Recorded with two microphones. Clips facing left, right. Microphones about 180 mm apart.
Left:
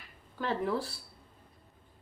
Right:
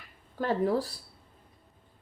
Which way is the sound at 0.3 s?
40° right (ahead or behind).